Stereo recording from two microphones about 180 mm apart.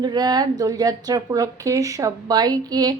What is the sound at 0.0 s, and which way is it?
Speech, 25° right (ahead or behind).